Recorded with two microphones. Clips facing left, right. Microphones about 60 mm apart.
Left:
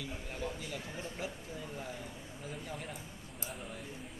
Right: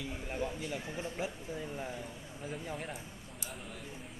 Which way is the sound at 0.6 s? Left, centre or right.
Right.